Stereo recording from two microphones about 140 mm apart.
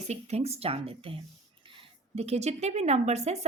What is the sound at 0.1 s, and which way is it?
A woman's voice, 50° right (ahead or behind).